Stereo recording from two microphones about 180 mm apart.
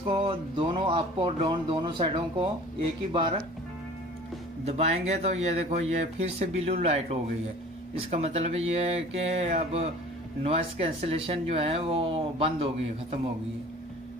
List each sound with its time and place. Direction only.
0.1 s speech: 30° right (ahead or behind)
4.6 s speech: 35° right (ahead or behind)